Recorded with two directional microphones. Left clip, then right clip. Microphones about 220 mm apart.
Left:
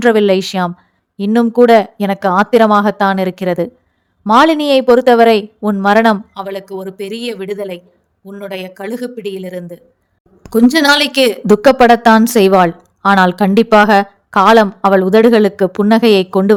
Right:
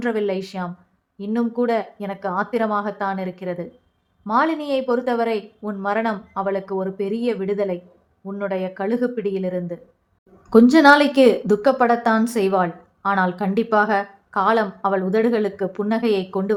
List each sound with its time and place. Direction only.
0.0 s a woman's voice: 40° left (ahead or behind)